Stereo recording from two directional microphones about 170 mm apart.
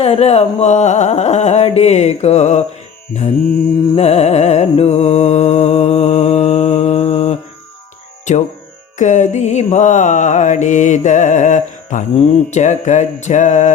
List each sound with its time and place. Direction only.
0.0 s a sound: 35° left (ahead or behind)
3.9 s music: 35° left (ahead or behind)
8.3 s mantra: 45° left (ahead or behind)